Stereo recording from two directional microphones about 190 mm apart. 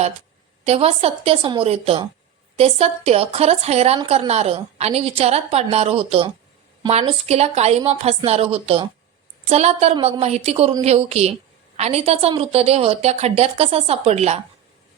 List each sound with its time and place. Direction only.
0.6 s a woman's voice: 35° right (ahead or behind)